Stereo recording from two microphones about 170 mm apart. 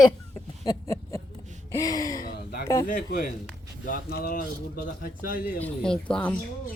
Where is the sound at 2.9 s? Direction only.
55° left (ahead or behind).